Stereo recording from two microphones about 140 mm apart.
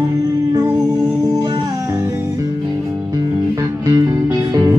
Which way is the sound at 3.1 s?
25° right (ahead or behind).